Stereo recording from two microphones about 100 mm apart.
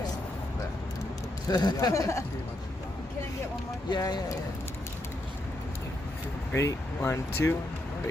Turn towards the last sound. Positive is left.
turn(degrees=25)  # may be behind; listen again after turning